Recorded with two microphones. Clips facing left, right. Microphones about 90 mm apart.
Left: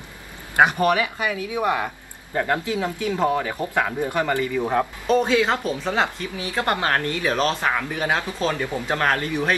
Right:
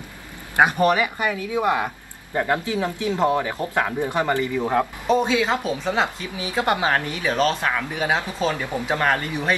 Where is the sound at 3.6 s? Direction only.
20° left (ahead or behind).